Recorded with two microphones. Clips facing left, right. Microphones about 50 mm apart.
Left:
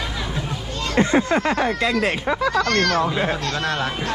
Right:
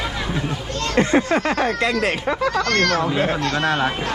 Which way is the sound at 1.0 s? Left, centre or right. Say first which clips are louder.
Even; right.